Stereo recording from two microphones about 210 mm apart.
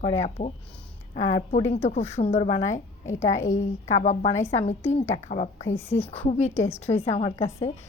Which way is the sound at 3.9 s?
35° left (ahead or behind).